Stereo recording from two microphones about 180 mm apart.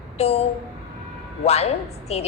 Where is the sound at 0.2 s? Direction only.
35° left (ahead or behind).